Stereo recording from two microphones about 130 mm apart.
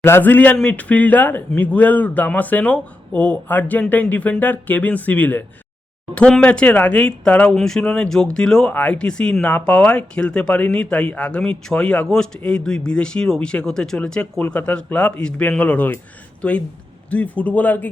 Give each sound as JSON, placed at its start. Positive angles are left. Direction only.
{"t": 0.0, "sound": "speech", "side_deg": 15}